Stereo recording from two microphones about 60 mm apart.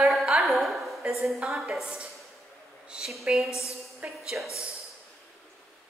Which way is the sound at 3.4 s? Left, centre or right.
Left.